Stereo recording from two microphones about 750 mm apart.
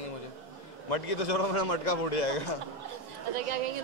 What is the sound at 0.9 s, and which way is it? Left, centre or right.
A man's voice, left.